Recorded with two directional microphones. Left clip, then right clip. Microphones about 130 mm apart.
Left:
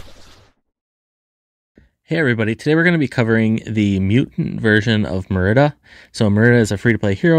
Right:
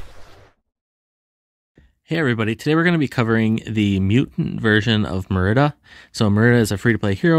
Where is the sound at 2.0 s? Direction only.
25° left (ahead or behind).